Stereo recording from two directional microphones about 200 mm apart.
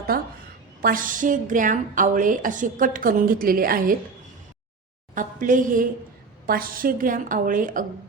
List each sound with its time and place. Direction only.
0.1 s a woman's voice: 45° right (ahead or behind)
5.1 s a woman's voice: 40° right (ahead or behind)